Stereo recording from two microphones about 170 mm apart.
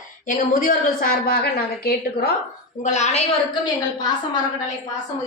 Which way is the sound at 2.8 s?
45° left (ahead or behind).